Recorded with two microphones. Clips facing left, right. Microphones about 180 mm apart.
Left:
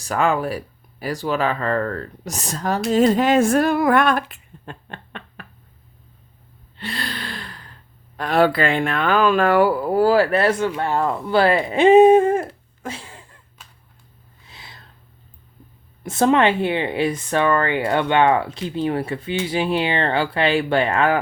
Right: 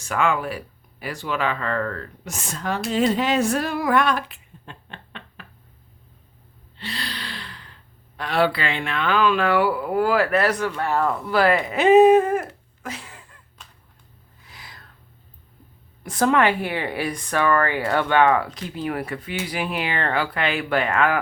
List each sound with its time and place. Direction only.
0.0 s speech: 40° left (ahead or behind)
6.7 s speech: 50° left (ahead or behind); by 13.4 s 30° left (ahead or behind)
14.4 s snort: 25° left (ahead or behind)
16.0 s speech: 25° left (ahead or behind)